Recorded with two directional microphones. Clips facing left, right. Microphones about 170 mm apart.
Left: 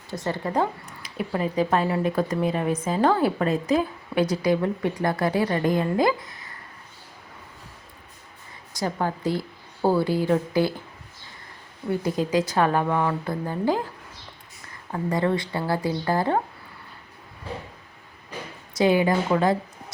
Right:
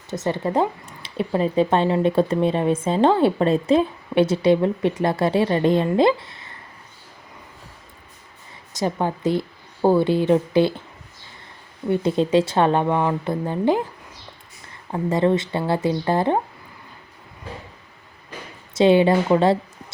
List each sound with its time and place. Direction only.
0.1 s speech: 20° right (ahead or behind)
8.7 s a woman's voice: 20° right (ahead or behind)
11.9 s speech: 25° right (ahead or behind)
14.9 s speech: 20° right (ahead or behind)
18.7 s speech: 25° right (ahead or behind)